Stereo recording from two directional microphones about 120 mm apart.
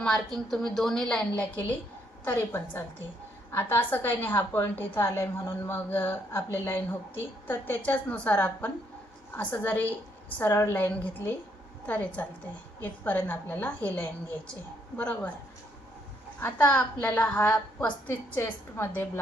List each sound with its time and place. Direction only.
0.0 s a woman's voice: 5° left (ahead or behind)
16.4 s a woman's voice: 15° left (ahead or behind)